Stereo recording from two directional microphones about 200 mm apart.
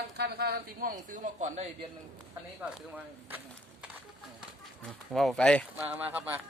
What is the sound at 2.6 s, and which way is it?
Speech, 5° right (ahead or behind).